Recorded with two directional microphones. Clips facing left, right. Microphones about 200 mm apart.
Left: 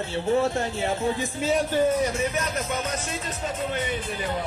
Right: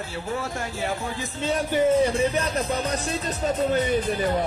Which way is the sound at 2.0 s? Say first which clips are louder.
Right 4 dB; 30° right (ahead or behind).